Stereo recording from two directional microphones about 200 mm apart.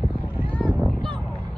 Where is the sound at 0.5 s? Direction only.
5° left (ahead or behind).